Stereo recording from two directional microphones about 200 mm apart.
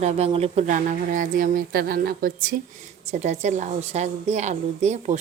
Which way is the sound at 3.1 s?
35° right (ahead or behind).